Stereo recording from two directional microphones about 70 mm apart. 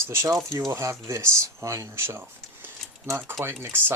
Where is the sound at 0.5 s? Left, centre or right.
Right.